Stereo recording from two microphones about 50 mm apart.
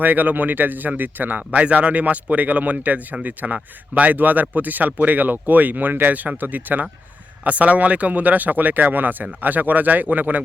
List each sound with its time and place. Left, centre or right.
0.0 s speech: right